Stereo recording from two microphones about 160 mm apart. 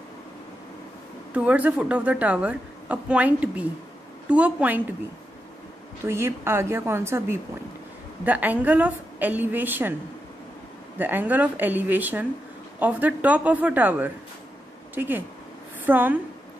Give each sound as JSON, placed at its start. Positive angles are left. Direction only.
{"t": 1.3, "sound": "a woman's voice", "side_deg": -10}
{"t": 6.0, "sound": "a woman's voice", "side_deg": -15}
{"t": 11.0, "sound": "a woman's voice", "side_deg": -10}